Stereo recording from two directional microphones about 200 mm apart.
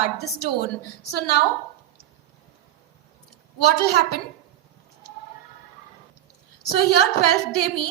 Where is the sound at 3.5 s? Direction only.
55° left (ahead or behind).